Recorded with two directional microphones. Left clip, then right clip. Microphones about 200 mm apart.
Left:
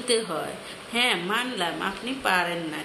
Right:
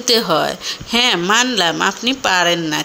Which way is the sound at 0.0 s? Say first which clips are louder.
Right 11 dB; 50° right (ahead or behind).